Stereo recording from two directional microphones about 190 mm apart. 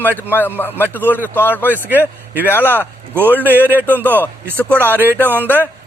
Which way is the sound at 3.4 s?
10° right (ahead or behind).